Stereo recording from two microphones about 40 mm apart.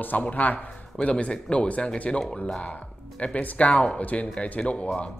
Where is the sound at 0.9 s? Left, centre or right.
Left.